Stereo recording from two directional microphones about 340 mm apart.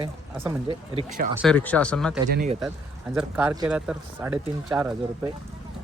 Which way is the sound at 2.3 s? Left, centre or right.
Right.